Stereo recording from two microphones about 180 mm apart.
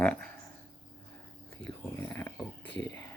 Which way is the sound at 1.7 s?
20° left (ahead or behind).